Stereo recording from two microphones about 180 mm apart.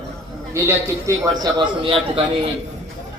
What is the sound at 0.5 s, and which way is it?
Speech, 15° right (ahead or behind).